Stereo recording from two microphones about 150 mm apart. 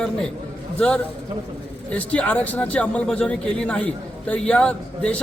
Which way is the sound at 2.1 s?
10° left (ahead or behind).